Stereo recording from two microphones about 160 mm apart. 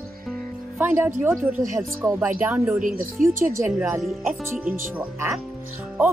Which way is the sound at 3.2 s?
55° right (ahead or behind).